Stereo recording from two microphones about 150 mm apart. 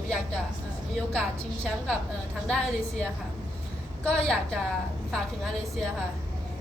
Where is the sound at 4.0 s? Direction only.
5° left (ahead or behind).